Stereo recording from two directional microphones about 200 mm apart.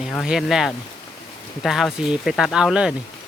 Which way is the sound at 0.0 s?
Centre (ahead or behind).